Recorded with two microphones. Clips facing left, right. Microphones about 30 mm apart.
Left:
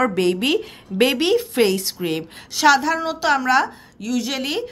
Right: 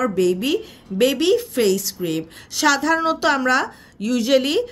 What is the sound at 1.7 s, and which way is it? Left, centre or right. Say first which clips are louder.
Speech: even; left.